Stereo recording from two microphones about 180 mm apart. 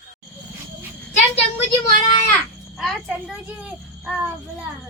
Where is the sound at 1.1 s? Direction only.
35° left (ahead or behind).